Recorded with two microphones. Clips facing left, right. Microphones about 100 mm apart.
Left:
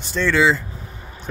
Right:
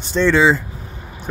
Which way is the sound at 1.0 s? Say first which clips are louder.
Right 3 dB; 15° right (ahead or behind).